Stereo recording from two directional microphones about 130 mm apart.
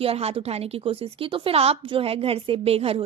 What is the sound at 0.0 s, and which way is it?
A woman's voice, 50° right (ahead or behind).